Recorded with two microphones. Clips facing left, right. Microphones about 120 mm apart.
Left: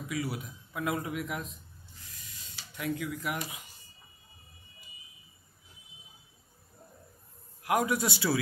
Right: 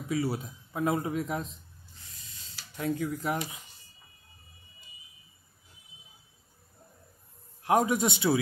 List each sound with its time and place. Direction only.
0.1 s speech: 30° right (ahead or behind)
2.0 s spray: 30° right (ahead or behind)
7.6 s speech: 25° right (ahead or behind)